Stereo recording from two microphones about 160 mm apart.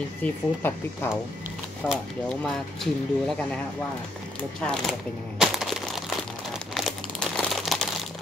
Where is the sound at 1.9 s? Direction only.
Centre (ahead or behind).